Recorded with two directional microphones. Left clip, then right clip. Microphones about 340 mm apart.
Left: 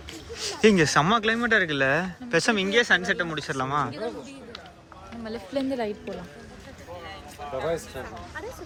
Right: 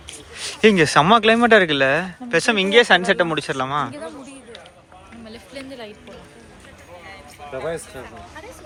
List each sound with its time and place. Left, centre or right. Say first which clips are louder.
0.3 s speech: right 5 dB; centre
5.2 s a woman's voice: left 7 dB; left